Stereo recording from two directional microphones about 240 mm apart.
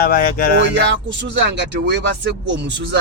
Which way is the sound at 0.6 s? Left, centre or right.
Right.